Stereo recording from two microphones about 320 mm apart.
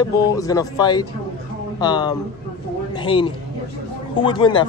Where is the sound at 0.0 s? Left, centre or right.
Centre.